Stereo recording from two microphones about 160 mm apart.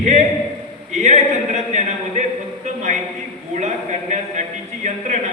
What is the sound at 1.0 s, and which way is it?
A man's voice, 45° right (ahead or behind).